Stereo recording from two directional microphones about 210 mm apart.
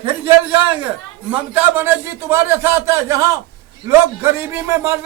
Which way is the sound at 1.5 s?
10° right (ahead or behind).